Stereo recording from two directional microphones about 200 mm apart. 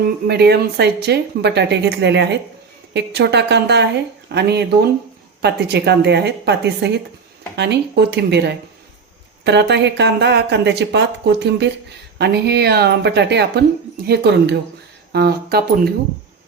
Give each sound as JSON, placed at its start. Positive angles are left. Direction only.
{"t": 0.0, "sound": "speech", "side_deg": -55}